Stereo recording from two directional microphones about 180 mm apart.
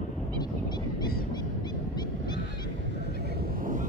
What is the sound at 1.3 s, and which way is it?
Fowl, 25° left (ahead or behind).